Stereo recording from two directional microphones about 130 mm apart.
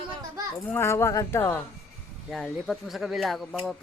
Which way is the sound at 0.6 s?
15° left (ahead or behind).